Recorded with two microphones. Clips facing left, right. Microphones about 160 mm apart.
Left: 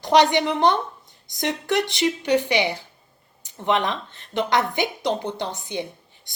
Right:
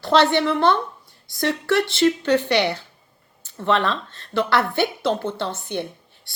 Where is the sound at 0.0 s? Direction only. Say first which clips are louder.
Even; 15° left (ahead or behind).